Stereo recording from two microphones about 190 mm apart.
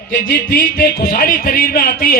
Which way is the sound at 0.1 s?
50° left (ahead or behind).